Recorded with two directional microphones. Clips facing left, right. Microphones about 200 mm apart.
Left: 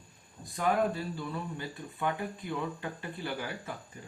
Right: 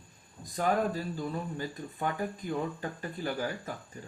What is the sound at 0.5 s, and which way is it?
Speech, 40° right (ahead or behind).